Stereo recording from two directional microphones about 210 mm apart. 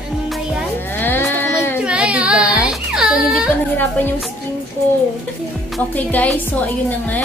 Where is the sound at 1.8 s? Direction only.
5° right (ahead or behind).